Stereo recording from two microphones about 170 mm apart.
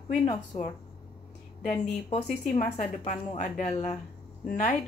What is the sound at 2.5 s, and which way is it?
A woman's voice, 40° left (ahead or behind).